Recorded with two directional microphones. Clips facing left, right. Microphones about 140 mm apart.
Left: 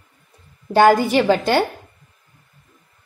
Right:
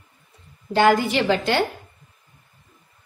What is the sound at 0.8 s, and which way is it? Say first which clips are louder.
Speech: left 4 dB; 35° left (ahead or behind).